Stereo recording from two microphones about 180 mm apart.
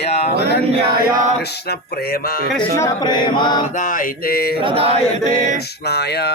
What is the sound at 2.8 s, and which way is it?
Chant, 25° left (ahead or behind).